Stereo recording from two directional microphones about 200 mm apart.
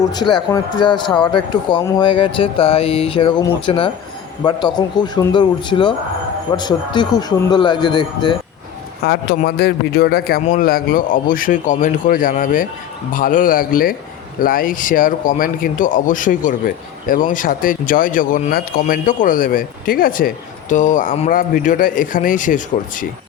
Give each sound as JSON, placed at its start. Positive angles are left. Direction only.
{"t": 0.1, "sound": "speech", "side_deg": 20}
{"t": 9.0, "sound": "speech", "side_deg": 50}